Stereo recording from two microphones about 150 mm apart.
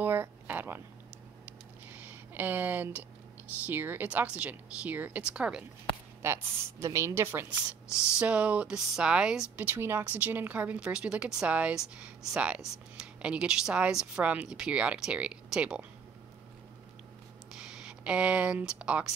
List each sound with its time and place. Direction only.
0.0 s a sound: 15° right (ahead or behind)
1.9 s a sound: 10° right (ahead or behind)
3.6 s a woman's voice: 15° right (ahead or behind)
6.2 s a woman's voice: 20° right (ahead or behind)
9.7 s a woman's voice: 15° right (ahead or behind)
17.6 s speech: 5° right (ahead or behind)